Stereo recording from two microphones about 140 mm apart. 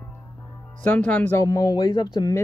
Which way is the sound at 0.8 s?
10° left (ahead or behind).